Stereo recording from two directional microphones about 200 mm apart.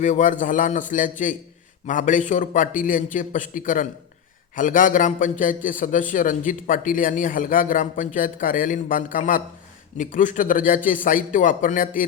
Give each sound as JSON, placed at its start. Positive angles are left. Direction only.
{"t": 0.0, "sound": "a man's voice", "side_deg": 40}